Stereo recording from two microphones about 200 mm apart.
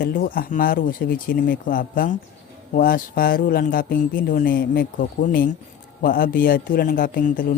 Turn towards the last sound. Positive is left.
turn(degrees=45)  # may be behind; listen again after turning